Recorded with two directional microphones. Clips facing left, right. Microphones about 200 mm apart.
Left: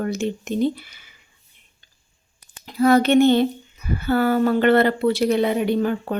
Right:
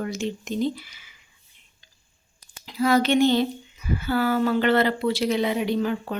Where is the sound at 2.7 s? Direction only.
55° left (ahead or behind).